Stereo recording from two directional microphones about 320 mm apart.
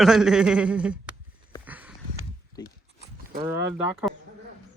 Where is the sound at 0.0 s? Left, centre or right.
Centre.